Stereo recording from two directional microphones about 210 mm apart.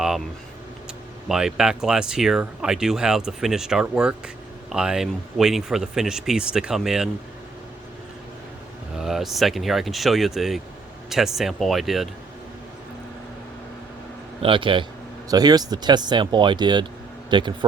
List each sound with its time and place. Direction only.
1.3 s speech: centre (ahead or behind)
9.0 s speech: centre (ahead or behind)
14.4 s a man's voice: 25° right (ahead or behind)